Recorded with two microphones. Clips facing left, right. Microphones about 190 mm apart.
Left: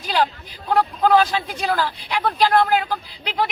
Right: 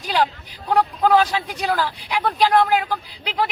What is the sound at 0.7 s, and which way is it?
A woman's voice, 15° right (ahead or behind).